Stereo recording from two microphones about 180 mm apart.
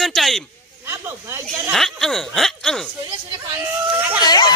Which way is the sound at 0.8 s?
15° right (ahead or behind).